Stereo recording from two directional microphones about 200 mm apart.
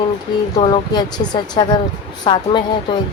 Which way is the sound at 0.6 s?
20° left (ahead or behind).